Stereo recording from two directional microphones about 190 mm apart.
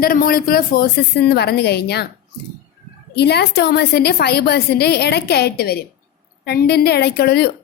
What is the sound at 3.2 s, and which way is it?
A woman's voice, 60° left (ahead or behind).